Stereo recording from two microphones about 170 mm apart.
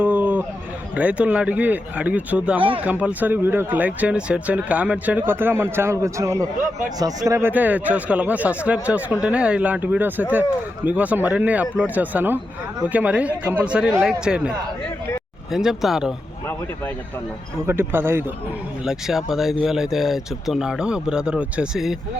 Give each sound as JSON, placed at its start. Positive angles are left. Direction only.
{"t": 0.0, "sound": "a sound", "side_deg": -10}
{"t": 0.9, "sound": "speech", "side_deg": -5}
{"t": 2.6, "sound": "speech", "side_deg": -30}
{"t": 2.8, "sound": "speech", "side_deg": -10}
{"t": 6.6, "sound": "a man's voice", "side_deg": -50}
{"t": 7.3, "sound": "speech", "side_deg": -15}
{"t": 15.5, "sound": "speech", "side_deg": 0}
{"t": 17.7, "sound": "speech", "side_deg": -15}
{"t": 18.9, "sound": "speech", "side_deg": 0}